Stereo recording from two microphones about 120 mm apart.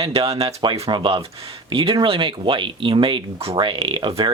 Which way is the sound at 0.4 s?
40° right (ahead or behind).